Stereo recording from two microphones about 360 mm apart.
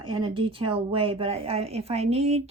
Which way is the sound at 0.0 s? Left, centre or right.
Centre.